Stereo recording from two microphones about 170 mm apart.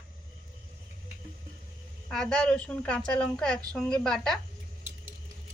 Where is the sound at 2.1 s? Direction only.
5° left (ahead or behind).